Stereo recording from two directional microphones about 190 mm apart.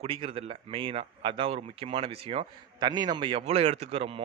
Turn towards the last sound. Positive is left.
turn(degrees=-30)  # may be behind; listen again after turning